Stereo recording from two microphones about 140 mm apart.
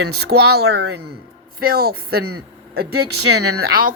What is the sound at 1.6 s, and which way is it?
Music, 90° right.